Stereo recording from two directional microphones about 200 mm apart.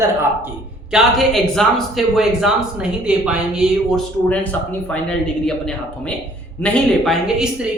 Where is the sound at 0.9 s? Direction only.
Centre (ahead or behind).